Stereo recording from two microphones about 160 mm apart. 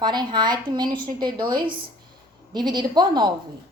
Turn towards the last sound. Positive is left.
turn(degrees=-25)  # may be behind; listen again after turning